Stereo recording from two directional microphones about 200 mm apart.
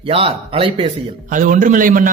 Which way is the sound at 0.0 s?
30° right (ahead or behind).